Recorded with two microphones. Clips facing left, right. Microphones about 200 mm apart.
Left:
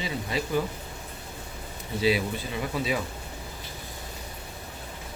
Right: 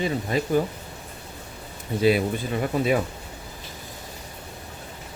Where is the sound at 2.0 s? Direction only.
50° right (ahead or behind).